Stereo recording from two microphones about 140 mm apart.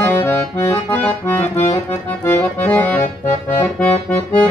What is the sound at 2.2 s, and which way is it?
Accordion, 10° left (ahead or behind).